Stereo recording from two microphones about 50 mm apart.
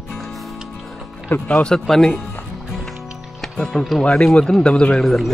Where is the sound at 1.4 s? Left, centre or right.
Left.